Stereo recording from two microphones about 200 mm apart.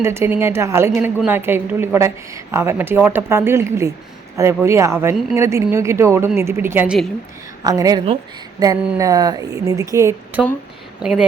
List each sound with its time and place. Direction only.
0.0 s a woman's voice: 10° right (ahead or behind)
7.6 s a woman's voice: 20° right (ahead or behind)